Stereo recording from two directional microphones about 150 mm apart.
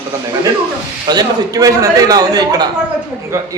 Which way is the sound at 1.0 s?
25° right (ahead or behind).